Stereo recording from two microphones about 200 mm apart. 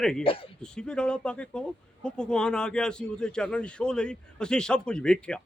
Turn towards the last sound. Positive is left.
turn(degrees=5)  # may be behind; listen again after turning